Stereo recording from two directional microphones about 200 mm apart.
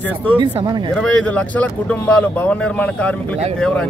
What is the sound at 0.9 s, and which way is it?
Speech, 5° left (ahead or behind).